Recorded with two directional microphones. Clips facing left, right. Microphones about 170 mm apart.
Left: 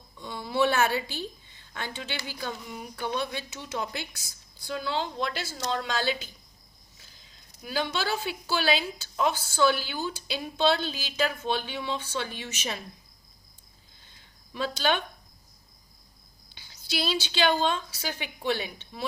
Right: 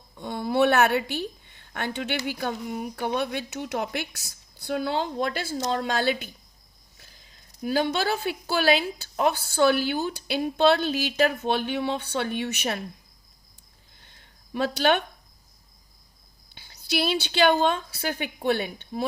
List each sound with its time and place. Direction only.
0.2 s a woman's voice: 55° right (ahead or behind)
7.6 s a woman's voice: 50° right (ahead or behind)
14.0 s a sound: 60° right (ahead or behind)
16.6 s a woman's voice: 60° right (ahead or behind)